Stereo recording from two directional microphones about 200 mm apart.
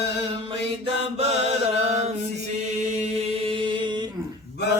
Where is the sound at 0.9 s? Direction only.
30° right (ahead or behind).